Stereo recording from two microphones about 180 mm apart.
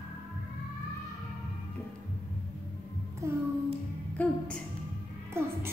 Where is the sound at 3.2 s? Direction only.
15° right (ahead or behind).